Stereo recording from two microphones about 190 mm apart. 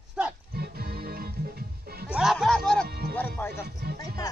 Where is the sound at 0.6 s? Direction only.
55° right (ahead or behind).